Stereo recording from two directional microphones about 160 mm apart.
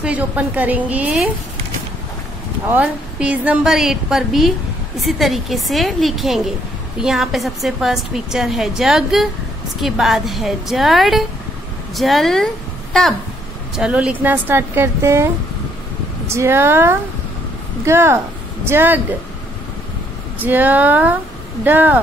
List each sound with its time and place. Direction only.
0.0 s a woman's voice: 10° right (ahead or behind)
2.7 s a woman's voice: 10° right (ahead or behind)
13.7 s a woman's voice: 5° right (ahead or behind)
16.3 s a woman's voice: 15° right (ahead or behind)
20.3 s a woman's voice: 10° right (ahead or behind)